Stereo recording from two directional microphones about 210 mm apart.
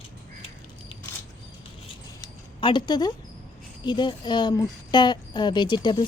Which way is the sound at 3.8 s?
20° left (ahead or behind).